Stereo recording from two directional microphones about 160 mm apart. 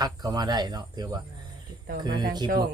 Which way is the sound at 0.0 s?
25° right (ahead or behind).